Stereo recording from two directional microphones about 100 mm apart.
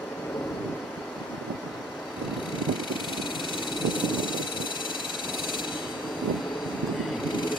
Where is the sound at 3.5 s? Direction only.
55° left (ahead or behind).